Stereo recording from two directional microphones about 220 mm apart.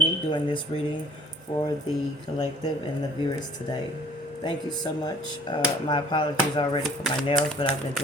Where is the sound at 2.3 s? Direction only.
25° left (ahead or behind).